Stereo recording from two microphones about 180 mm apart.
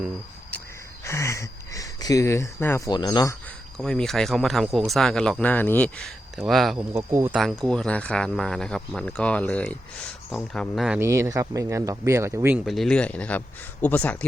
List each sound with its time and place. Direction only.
1.0 s speech: 15° left (ahead or behind)
3.8 s speech: 5° left (ahead or behind)
6.9 s speech: 15° right (ahead or behind)
7.4 s speech: 5° left (ahead or behind)
11.0 s speech: 15° right (ahead or behind)
12.6 s speech: centre (ahead or behind)